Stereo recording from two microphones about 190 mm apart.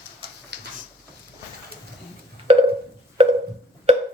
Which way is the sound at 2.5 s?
35° right (ahead or behind).